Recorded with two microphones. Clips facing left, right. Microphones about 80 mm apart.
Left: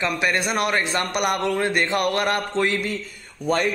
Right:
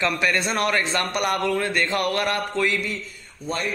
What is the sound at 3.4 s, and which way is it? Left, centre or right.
Speech, left.